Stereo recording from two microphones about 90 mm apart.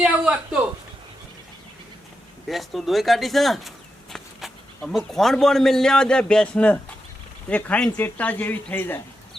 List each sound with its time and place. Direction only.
0.0 s speech: 5° right (ahead or behind)
2.5 s a man's voice: centre (ahead or behind)
4.1 s insect: 5° right (ahead or behind)
4.9 s a man's voice: 5° left (ahead or behind); by 9.0 s 20° left (ahead or behind)